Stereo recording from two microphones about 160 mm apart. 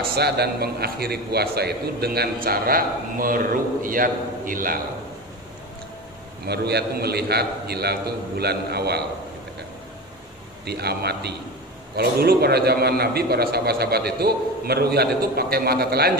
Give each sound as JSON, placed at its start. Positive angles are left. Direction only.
{"t": 0.0, "sound": "a man's voice", "side_deg": -85}
{"t": 6.4, "sound": "a man's voice", "side_deg": -90}
{"t": 10.6, "sound": "a man's voice", "side_deg": -90}
{"t": 11.9, "sound": "a man's voice", "side_deg": -75}